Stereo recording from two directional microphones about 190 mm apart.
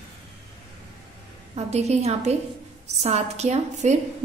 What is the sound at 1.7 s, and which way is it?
A woman's voice, 35° right (ahead or behind).